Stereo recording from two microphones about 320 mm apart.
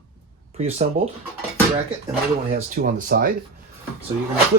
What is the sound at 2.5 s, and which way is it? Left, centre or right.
Speech, right.